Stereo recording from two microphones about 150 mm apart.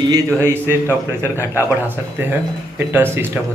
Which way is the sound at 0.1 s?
15° right (ahead or behind).